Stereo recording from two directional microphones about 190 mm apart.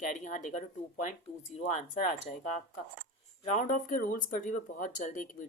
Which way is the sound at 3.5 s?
40° left (ahead or behind).